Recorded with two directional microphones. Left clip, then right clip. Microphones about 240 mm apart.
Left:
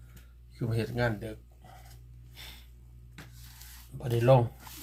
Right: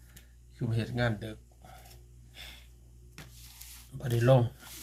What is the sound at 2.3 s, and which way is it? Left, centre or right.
Snort, centre.